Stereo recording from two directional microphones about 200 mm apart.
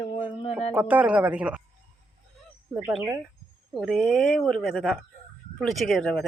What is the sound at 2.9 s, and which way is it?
Speech, 10° right (ahead or behind).